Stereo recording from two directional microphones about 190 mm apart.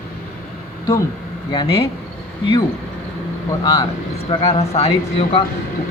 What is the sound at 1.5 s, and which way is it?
Speech, 25° left (ahead or behind).